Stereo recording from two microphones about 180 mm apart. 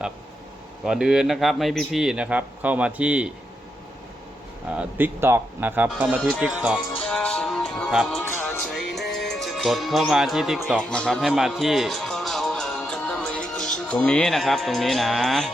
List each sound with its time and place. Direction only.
0.9 s speech: 5° right (ahead or behind)
4.7 s speech: 10° right (ahead or behind)
7.0 s music: 5° left (ahead or behind)
13.7 s speech: 5° left (ahead or behind)